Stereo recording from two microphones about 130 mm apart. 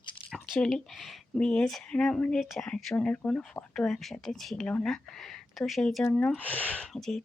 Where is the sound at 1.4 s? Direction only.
5° left (ahead or behind).